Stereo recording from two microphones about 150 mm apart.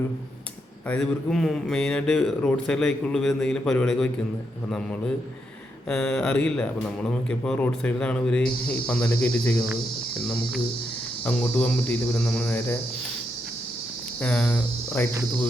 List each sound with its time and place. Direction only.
0.9 s speech: 5° left (ahead or behind)
5.9 s speech: 5° left (ahead or behind)
8.9 s cricket: 10° left (ahead or behind)
11.3 s cricket: 10° left (ahead or behind)
14.2 s cricket: 10° left (ahead or behind)